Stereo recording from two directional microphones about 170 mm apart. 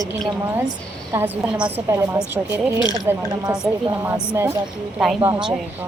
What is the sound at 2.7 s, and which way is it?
Speech, 25° left (ahead or behind).